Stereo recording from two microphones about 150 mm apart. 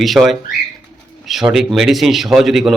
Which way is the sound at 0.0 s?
Centre (ahead or behind).